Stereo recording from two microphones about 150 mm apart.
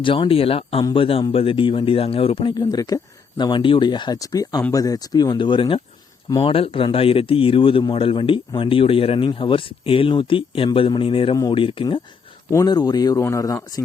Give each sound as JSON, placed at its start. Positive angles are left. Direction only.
{"t": 0.0, "sound": "speech", "side_deg": 35}
{"t": 12.5, "sound": "speech", "side_deg": 25}